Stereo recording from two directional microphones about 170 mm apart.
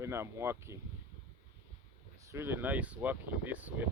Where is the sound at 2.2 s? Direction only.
15° right (ahead or behind).